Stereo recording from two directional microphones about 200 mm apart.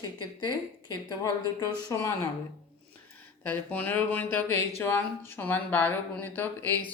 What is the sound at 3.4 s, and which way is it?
A woman's voice, 5° left (ahead or behind).